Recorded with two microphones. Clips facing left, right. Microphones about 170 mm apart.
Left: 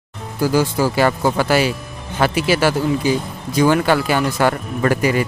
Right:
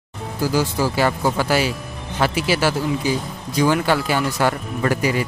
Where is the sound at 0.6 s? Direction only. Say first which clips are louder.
Left 3 dB; 60° left (ahead or behind).